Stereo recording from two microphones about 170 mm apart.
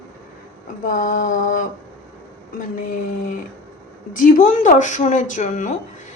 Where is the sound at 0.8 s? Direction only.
50° left (ahead or behind).